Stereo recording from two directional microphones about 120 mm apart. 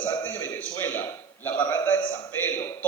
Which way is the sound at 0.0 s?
15° left (ahead or behind).